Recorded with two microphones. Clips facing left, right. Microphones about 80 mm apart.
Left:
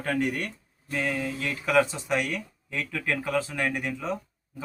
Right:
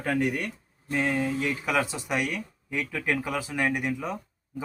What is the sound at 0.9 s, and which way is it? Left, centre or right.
Speech, centre.